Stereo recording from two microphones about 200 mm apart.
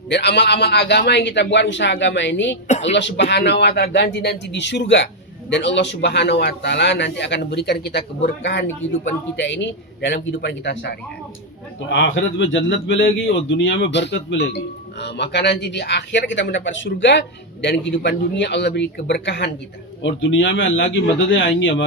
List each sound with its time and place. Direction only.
0.1 s a man's voice: 60° left (ahead or behind)
2.6 s speech: 35° left (ahead or behind)
2.9 s a man's voice: 60° left (ahead or behind)
11.9 s a man's voice: 75° left (ahead or behind)